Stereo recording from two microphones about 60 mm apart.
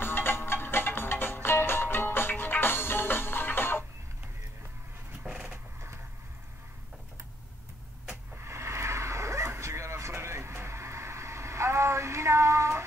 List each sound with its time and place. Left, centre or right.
0.0 s music: left
5.2 s a sound: centre
8.5 s dog: right